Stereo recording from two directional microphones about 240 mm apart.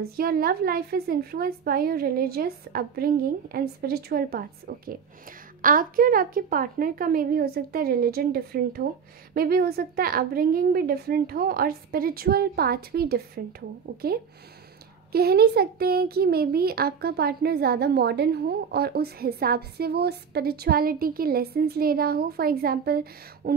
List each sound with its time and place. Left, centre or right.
0.0 s a child's voice: right
15.1 s a child's voice: right